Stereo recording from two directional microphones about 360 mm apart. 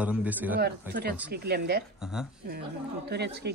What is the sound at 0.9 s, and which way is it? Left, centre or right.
Speech, right.